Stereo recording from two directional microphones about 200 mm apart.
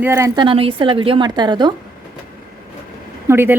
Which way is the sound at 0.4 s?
25° right (ahead or behind).